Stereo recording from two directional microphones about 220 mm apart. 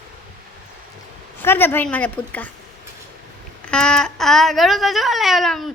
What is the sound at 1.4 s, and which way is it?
A woman's voice, 10° left (ahead or behind).